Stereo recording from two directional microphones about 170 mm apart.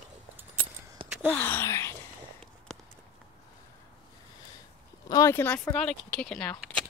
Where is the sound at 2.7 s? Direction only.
5° left (ahead or behind).